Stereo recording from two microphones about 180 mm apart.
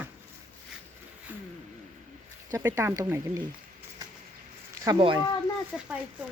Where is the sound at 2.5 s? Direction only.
15° right (ahead or behind).